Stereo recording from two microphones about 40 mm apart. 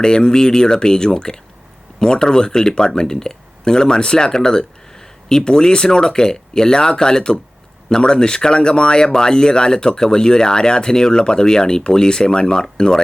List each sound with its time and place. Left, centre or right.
0.0 s speech: centre